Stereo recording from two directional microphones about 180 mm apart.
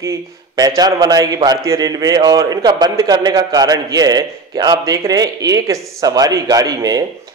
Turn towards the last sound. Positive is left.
turn(degrees=-20)  # may be behind; listen again after turning